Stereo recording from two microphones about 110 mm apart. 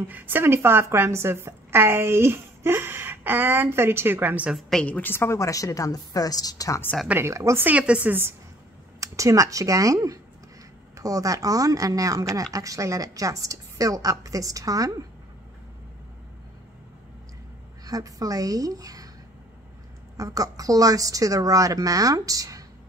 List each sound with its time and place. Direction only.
0.1 s a woman's voice: 15° right (ahead or behind)
4.6 s a woman's voice: 5° left (ahead or behind); by 6.8 s 35° left (ahead or behind)
7.1 s a woman's voice: 25° right (ahead or behind)
7.6 s speech: 10° right (ahead or behind)
9.0 s speech: 30° right (ahead or behind)
17.8 s speech: 35° right (ahead or behind)
20.2 s speech: 30° right (ahead or behind)